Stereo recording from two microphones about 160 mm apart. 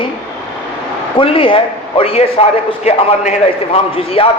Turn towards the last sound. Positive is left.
turn(degrees=35)  # may be behind; listen again after turning